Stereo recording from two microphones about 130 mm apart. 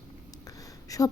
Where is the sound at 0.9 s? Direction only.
25° left (ahead or behind).